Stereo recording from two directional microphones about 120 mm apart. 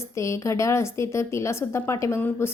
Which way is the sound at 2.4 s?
20° left (ahead or behind).